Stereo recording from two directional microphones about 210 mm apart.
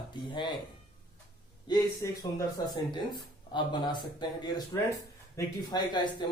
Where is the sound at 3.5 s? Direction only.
20° left (ahead or behind).